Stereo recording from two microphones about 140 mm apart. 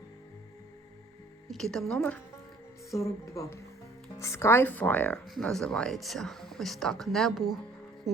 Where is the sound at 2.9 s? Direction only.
20° left (ahead or behind); by 7.6 s centre (ahead or behind).